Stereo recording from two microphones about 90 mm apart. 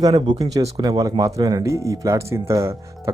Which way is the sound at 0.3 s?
45° right (ahead or behind).